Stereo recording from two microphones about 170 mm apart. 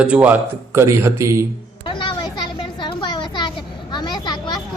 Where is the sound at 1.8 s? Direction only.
30° left (ahead or behind).